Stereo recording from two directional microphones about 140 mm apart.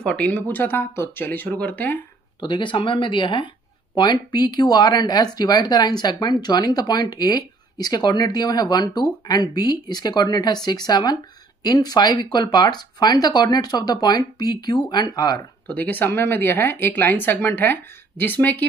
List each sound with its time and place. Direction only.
0.0 s speech: 10° left (ahead or behind)
2.4 s speech: 35° left (ahead or behind)
15.6 s speech: 10° left (ahead or behind)